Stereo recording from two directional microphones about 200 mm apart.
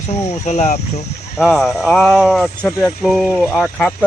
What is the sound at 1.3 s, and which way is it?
Speech, centre (ahead or behind).